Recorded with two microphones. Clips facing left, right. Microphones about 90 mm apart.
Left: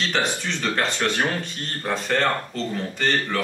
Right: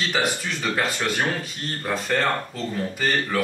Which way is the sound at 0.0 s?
5° right (ahead or behind).